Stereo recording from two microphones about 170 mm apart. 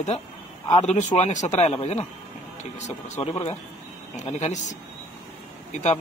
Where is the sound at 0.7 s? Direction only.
40° left (ahead or behind).